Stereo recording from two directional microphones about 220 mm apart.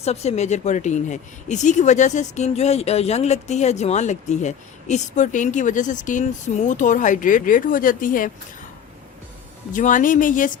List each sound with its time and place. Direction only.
0.0 s speech: 30° left (ahead or behind)
9.7 s speech: 35° left (ahead or behind)